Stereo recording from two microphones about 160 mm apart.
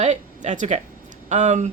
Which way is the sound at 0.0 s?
50° right (ahead or behind).